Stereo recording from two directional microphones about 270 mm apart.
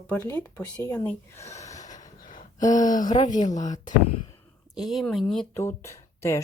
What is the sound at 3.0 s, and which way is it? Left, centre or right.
Speech, centre.